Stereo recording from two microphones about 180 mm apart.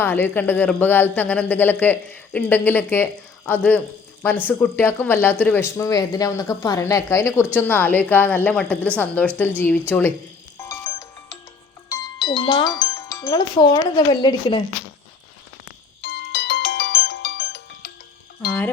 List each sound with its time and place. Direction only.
0.0 s speech: 10° left (ahead or behind)
10.6 s music: 15° left (ahead or behind)
11.9 s speech: 20° left (ahead or behind)
16.0 s music: 75° left (ahead or behind)